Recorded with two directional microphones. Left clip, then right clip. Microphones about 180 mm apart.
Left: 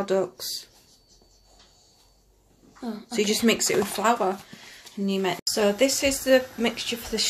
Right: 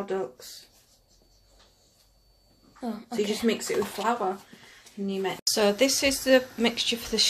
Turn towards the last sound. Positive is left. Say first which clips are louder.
# right 2 dB
turn(degrees=-5)  # may be behind; listen again after turning